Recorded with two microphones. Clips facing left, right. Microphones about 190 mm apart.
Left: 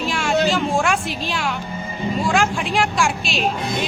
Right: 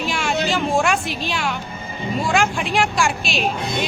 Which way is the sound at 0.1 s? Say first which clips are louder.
Left 1 dB; centre (ahead or behind).